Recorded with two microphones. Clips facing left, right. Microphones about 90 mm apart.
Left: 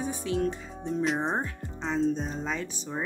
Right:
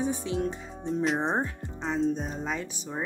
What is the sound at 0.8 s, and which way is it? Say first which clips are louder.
Speech: right 1 dB; centre (ahead or behind).